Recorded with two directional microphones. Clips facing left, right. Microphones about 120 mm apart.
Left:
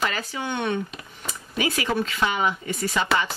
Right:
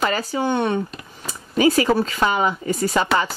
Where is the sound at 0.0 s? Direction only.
35° right (ahead or behind).